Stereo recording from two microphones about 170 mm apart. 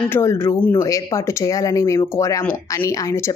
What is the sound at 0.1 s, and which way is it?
Speech, 15° left (ahead or behind).